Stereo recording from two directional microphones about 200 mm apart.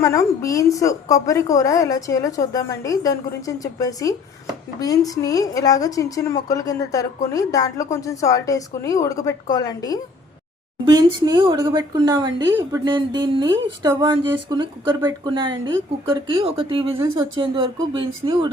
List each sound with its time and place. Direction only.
0.0 s a woman's voice: 15° left (ahead or behind)
10.9 s speech: 20° right (ahead or behind)